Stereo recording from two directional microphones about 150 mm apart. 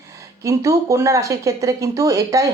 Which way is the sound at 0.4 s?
20° right (ahead or behind).